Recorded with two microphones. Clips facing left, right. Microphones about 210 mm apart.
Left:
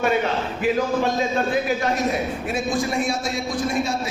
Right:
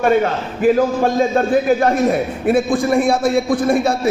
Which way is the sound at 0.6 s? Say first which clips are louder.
Right 8 dB; 50° right (ahead or behind).